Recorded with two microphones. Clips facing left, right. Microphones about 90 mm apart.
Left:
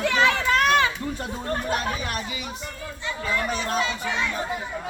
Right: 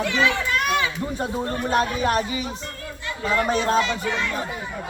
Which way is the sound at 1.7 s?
35° right (ahead or behind).